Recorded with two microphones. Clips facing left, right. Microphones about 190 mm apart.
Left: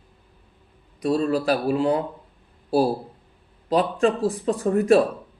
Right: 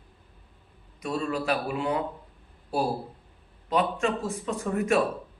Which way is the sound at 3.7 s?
35° left (ahead or behind).